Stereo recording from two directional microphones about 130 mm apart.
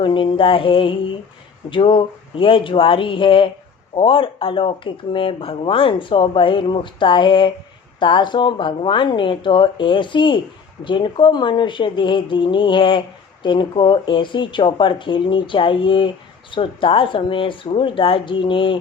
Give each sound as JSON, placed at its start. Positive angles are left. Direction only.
{"t": 0.0, "sound": "a woman's voice", "side_deg": 40}